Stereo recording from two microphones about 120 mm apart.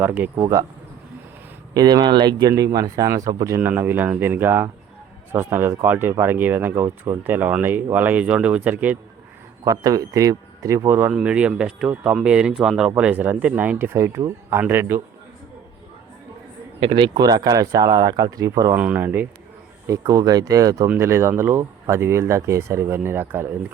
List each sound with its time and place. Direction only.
0.0 s speech: 15° right (ahead or behind)
0.3 s speech: 30° right (ahead or behind)
1.7 s speech: 35° right (ahead or behind)
3.6 s speech: 15° right (ahead or behind)
9.6 s speech: 30° right (ahead or behind)
11.1 s speech: 10° right (ahead or behind)
16.8 s speech: 45° right (ahead or behind); by 18.8 s 25° right (ahead or behind)
18.8 s speech: 15° right (ahead or behind)
19.9 s speech: 30° right (ahead or behind)